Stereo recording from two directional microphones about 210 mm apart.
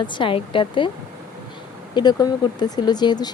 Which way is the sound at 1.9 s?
20° left (ahead or behind).